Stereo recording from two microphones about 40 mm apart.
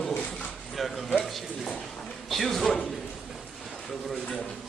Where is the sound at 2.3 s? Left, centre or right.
Centre.